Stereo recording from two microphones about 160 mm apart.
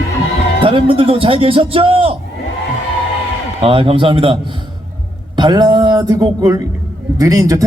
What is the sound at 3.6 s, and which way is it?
A man's voice, 35° right (ahead or behind).